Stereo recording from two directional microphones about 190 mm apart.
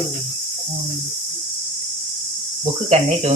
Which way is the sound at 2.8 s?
35° right (ahead or behind).